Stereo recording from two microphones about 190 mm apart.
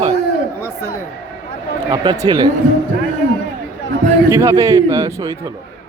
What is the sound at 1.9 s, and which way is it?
Speech, 25° right (ahead or behind).